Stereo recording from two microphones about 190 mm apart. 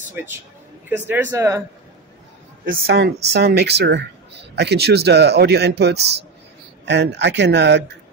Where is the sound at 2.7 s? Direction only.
60° right (ahead or behind).